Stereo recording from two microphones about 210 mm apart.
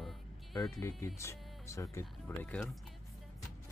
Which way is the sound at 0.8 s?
15° left (ahead or behind).